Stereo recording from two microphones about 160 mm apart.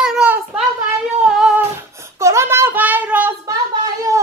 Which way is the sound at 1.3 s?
5° right (ahead or behind).